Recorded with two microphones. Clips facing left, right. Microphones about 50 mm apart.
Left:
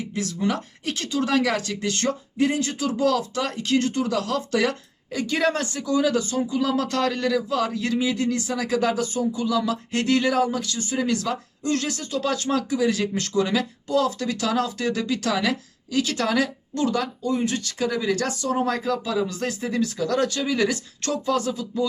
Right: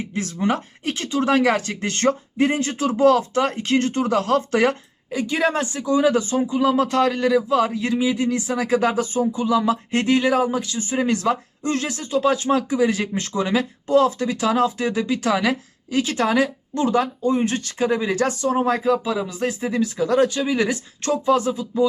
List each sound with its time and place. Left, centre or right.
0.0 s speech: right
5.1 s speech: centre